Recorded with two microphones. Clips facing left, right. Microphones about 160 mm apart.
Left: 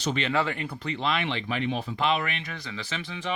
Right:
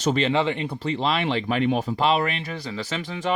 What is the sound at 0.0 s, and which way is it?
Speech, 40° right (ahead or behind).